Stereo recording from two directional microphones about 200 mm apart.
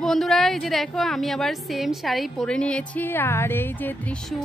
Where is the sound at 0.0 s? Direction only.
Centre (ahead or behind).